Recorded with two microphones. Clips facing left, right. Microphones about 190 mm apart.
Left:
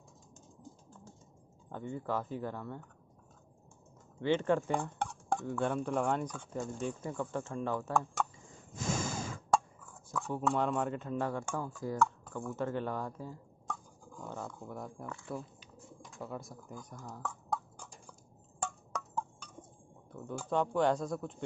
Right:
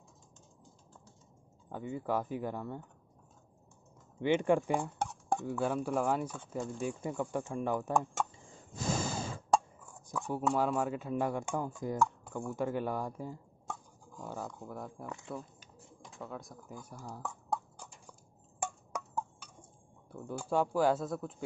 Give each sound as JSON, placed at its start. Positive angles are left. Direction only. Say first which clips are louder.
{"t": 1.7, "sound": "speech", "louder": "right 2 dB", "side_deg": -10}
{"t": 4.2, "sound": "speech", "louder": "right 2 dB", "side_deg": -15}
{"t": 8.7, "sound": "plop", "louder": "right 1 dB", "side_deg": -35}
{"t": 10.1, "sound": "speech", "louder": "right 1 dB", "side_deg": -15}
{"t": 14.1, "sound": "speech", "louder": "right 1 dB", "side_deg": -5}
{"t": 15.0, "sound": "speech", "louder": "even", "side_deg": -20}
{"t": 16.2, "sound": "speech", "louder": "left 1 dB", "side_deg": 0}
{"t": 18.6, "sound": "a sound", "louder": "right 1 dB", "side_deg": -10}
{"t": 20.1, "sound": "speech", "louder": "right 1 dB", "side_deg": -10}